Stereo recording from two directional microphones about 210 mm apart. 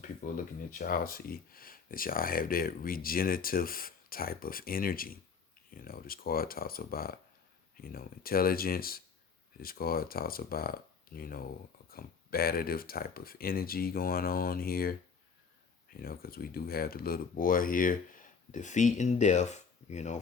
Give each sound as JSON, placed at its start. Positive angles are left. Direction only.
{"t": 0.2, "sound": "speech", "side_deg": 40}
{"t": 16.0, "sound": "speech", "side_deg": 45}